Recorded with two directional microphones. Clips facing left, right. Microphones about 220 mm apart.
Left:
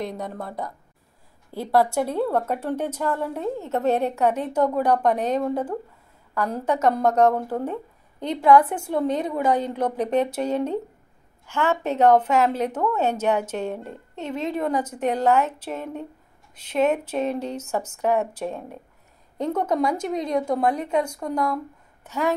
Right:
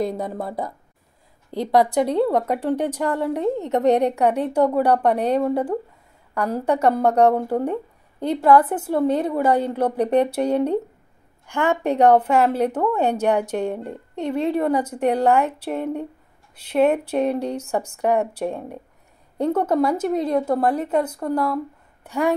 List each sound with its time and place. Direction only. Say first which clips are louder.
0.4 s speech: right 4 dB; 35° right (ahead or behind)
1.5 s a woman's voice: right 3 dB; 20° right (ahead or behind)